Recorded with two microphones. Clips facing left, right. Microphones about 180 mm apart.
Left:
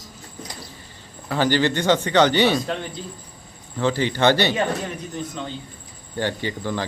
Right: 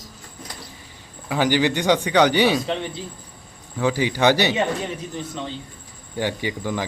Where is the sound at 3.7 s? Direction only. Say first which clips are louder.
Even; 10° right (ahead or behind).